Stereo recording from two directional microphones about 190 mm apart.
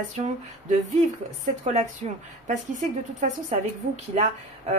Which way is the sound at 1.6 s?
35° right (ahead or behind).